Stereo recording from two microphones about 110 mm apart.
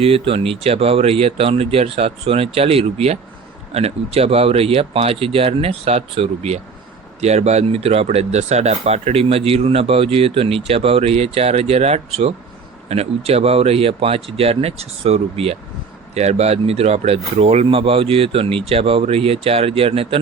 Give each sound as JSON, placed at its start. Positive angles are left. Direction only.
{"t": 0.0, "sound": "speech", "side_deg": -60}
{"t": 7.2, "sound": "speech", "side_deg": -80}
{"t": 16.1, "sound": "speech", "side_deg": -80}